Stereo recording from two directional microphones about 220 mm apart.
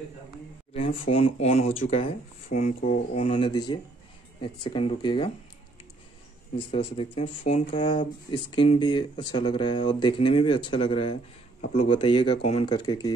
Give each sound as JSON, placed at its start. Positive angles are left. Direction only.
{"t": 0.7, "sound": "speech", "side_deg": 25}
{"t": 6.7, "sound": "speech", "side_deg": 25}